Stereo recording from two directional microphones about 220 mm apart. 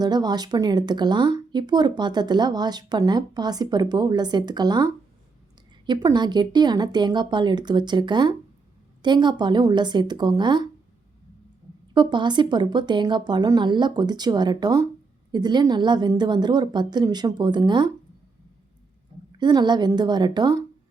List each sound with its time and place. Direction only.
0.0 s speech: 20° right (ahead or behind)
11.9 s speech: 20° right (ahead or behind)
19.4 s speech: 20° right (ahead or behind)